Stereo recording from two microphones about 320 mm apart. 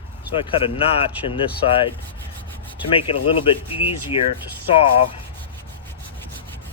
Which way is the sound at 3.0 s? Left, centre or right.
Centre.